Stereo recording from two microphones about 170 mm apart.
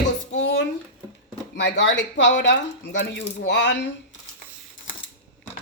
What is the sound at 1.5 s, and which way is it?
Speech, 90° left.